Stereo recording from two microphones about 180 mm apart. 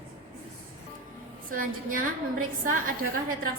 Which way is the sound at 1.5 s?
50° right (ahead or behind).